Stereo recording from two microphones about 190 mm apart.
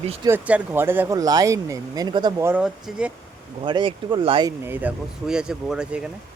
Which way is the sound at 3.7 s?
25° right (ahead or behind).